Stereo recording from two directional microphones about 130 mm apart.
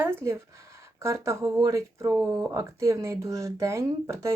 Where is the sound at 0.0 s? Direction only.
15° right (ahead or behind).